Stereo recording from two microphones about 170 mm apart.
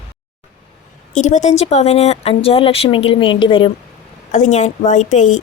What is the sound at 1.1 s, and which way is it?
Speech, 45° left (ahead or behind).